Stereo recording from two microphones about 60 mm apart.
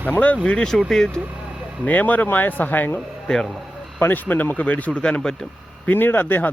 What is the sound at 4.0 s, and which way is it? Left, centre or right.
Speech, left.